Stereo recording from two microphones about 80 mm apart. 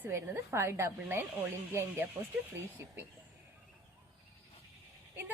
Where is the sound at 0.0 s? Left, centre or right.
Right.